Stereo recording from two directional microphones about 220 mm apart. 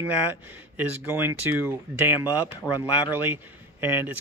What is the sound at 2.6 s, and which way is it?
Speech, 10° left (ahead or behind).